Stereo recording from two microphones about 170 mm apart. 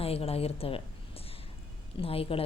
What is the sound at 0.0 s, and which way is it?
Speech, 35° left (ahead or behind).